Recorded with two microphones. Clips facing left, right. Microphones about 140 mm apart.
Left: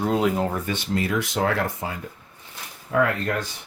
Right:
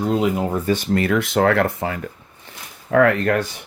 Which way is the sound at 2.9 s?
80° right.